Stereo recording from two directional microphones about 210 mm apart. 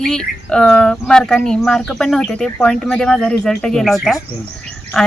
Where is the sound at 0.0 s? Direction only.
5° left (ahead or behind).